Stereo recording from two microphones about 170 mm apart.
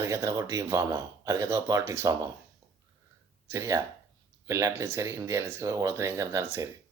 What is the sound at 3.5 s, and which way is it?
Speech, 15° right (ahead or behind).